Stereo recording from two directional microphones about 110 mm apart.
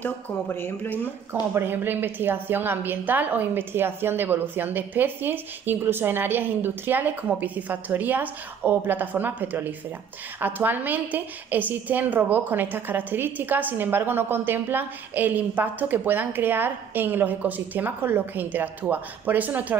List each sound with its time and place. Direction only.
0.0 s speech: 20° left (ahead or behind)
1.3 s a woman's voice: 20° right (ahead or behind)